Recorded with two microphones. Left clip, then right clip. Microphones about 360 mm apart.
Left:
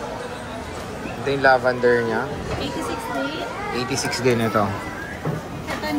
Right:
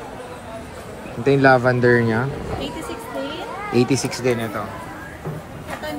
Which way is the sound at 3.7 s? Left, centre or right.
Centre.